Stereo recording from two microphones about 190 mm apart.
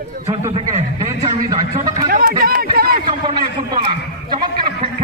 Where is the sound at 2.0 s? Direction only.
50° right (ahead or behind).